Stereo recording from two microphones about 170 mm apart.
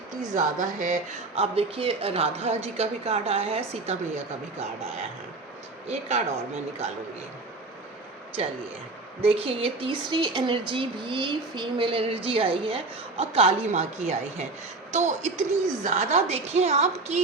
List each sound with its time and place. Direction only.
0.3 s speech: 45° right (ahead or behind)
5.9 s speech: 40° right (ahead or behind)
9.2 s speech: 35° right (ahead or behind)